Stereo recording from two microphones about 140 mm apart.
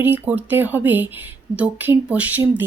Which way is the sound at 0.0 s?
15° right (ahead or behind).